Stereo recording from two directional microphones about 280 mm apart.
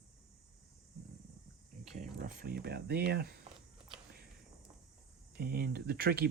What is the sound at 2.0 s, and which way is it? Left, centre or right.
Speech, right.